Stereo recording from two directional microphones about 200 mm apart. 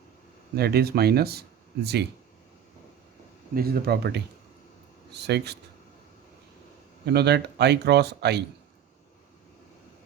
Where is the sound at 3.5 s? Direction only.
50° right (ahead or behind).